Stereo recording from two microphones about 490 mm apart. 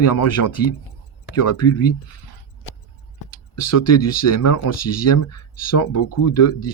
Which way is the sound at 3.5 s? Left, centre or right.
Left.